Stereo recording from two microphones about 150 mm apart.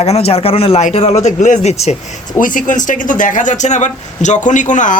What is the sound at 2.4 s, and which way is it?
Speech, 60° left (ahead or behind).